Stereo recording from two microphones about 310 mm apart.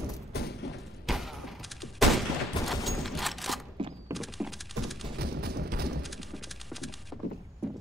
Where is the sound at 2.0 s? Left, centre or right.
Centre.